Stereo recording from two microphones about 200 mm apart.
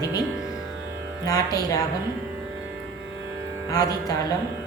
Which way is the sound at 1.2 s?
20° left (ahead or behind).